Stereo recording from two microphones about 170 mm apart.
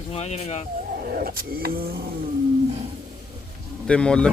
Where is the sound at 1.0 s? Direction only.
60° right (ahead or behind).